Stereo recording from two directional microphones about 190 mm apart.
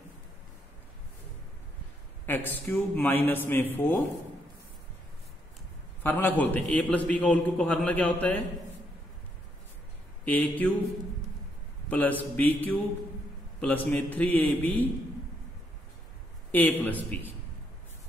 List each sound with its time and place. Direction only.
2.2 s a man's voice: 10° left (ahead or behind)
6.0 s a man's voice: 10° left (ahead or behind)
10.2 s a man's voice: 10° left (ahead or behind)
11.9 s a man's voice: 10° left (ahead or behind)
16.5 s a man's voice: 10° left (ahead or behind)